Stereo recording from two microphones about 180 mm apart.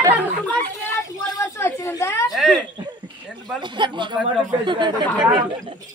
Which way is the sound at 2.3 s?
Centre (ahead or behind).